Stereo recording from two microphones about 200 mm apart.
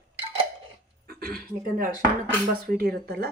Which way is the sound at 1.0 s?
50° right (ahead or behind).